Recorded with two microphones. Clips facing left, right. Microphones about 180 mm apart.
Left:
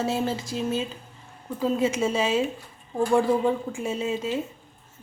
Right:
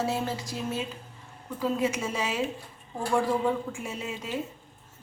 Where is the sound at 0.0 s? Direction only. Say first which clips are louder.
Left 3 dB; 25° left (ahead or behind).